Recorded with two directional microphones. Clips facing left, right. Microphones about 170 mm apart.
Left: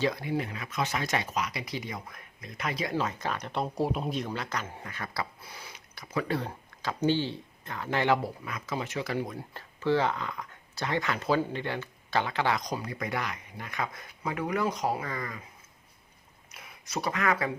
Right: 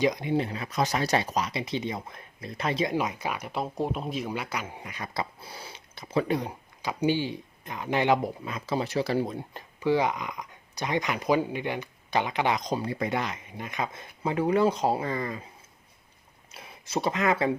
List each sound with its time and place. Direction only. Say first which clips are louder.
0.0 s speech: right 4 dB; 20° right (ahead or behind)
2.9 s speech: right 2 dB; 10° right (ahead or behind)
4.3 s speech: right 2 dB; 10° right (ahead or behind)
6.3 s speech: right 3 dB; 15° right (ahead or behind)
16.5 s speech: right 6 dB; 30° right (ahead or behind)